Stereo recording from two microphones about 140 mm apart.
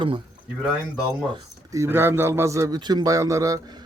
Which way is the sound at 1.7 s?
20° right (ahead or behind).